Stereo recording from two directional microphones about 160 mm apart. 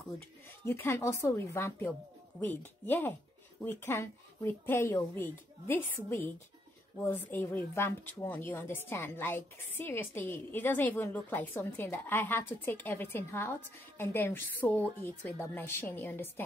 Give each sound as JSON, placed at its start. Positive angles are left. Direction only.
{"t": 0.7, "sound": "a woman's voice", "side_deg": 15}